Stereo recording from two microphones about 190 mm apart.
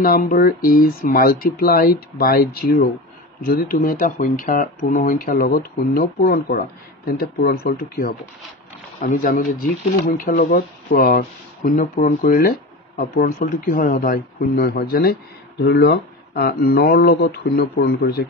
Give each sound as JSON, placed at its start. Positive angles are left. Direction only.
{"t": 0.0, "sound": "speech", "side_deg": 50}